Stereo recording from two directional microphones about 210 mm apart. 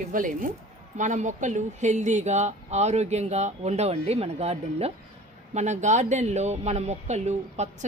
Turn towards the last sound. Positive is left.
turn(degrees=-35)  # may be behind; listen again after turning